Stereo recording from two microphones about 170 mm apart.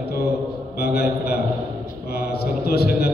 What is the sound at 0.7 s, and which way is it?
Mantra, 70° left (ahead or behind).